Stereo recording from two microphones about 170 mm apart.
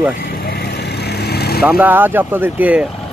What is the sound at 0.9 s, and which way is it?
Vehicle, 75° left (ahead or behind).